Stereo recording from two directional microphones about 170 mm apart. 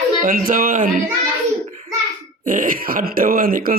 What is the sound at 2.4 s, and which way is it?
A man's voice, 55° right (ahead or behind).